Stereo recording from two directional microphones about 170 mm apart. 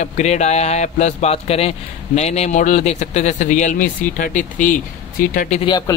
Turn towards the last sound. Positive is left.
turn(degrees=25)  # may be behind; listen again after turning